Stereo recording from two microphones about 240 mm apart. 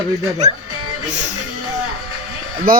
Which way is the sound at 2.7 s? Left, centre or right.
Right.